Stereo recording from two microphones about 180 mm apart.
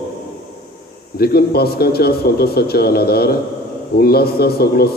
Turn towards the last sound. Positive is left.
turn(degrees=60)  # may be behind; listen again after turning